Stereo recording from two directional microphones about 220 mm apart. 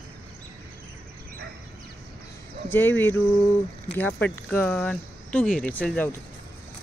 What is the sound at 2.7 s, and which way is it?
Speech, 10° left (ahead or behind).